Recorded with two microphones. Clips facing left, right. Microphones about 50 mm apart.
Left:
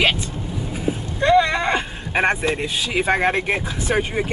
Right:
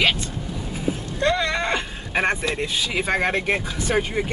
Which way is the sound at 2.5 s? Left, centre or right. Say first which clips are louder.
Left 2 dB; centre.